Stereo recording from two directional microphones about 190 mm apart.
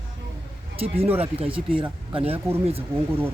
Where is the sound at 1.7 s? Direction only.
25° right (ahead or behind).